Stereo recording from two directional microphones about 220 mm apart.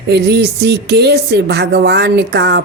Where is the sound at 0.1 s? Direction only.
50° right (ahead or behind).